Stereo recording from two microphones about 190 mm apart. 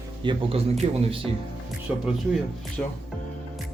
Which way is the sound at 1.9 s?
10° right (ahead or behind).